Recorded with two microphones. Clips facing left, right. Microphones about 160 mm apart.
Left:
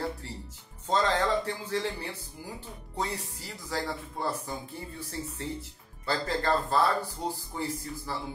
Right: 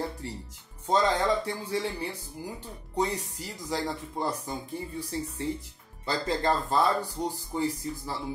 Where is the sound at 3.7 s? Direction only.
20° right (ahead or behind).